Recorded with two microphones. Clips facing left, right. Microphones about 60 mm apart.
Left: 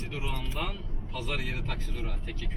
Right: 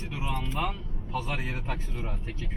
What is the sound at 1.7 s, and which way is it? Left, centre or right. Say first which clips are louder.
Speech: right 2 dB; right.